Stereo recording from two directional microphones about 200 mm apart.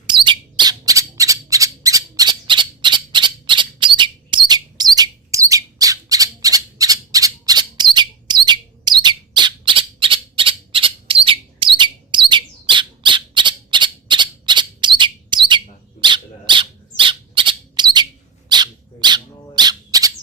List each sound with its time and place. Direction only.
0.1 s squawk: 25° right (ahead or behind)